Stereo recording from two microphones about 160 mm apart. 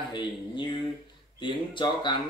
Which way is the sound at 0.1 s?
30° left (ahead or behind).